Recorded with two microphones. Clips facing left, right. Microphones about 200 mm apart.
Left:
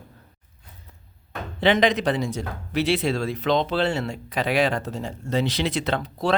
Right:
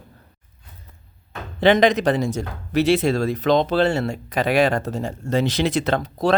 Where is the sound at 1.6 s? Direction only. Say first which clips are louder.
Right 4 dB; 45° right (ahead or behind).